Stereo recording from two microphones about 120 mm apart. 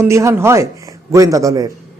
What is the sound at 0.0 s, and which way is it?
Speech, 25° right (ahead or behind).